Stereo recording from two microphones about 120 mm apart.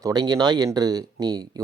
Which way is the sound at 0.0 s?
35° right (ahead or behind).